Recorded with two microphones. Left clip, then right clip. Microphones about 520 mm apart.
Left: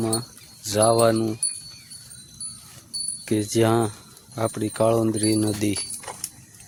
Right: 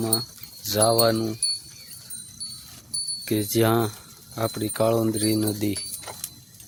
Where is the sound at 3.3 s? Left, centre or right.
Right.